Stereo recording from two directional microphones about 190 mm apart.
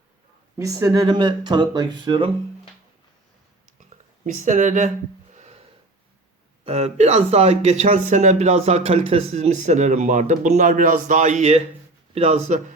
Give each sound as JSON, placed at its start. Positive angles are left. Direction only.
{"t": 0.6, "sound": "speech", "side_deg": -20}
{"t": 3.8, "sound": "speech", "side_deg": -40}
{"t": 5.3, "sound": "a sound", "side_deg": -35}
{"t": 6.7, "sound": "speech", "side_deg": -35}